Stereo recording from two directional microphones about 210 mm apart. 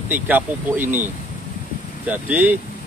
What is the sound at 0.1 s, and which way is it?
Speech, 10° right (ahead or behind).